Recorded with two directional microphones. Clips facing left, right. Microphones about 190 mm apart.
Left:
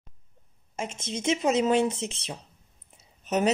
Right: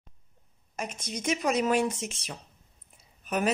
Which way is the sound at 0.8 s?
25° left (ahead or behind).